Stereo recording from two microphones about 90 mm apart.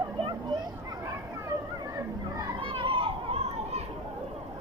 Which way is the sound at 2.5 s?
75° right (ahead or behind).